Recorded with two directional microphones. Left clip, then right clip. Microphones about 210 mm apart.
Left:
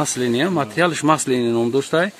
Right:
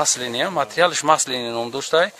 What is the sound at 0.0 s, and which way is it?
Speech, 25° right (ahead or behind).